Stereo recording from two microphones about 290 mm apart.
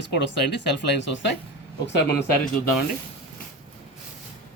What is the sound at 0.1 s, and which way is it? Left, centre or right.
Speech, left.